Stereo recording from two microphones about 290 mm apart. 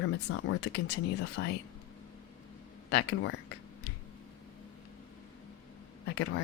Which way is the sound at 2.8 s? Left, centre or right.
Left.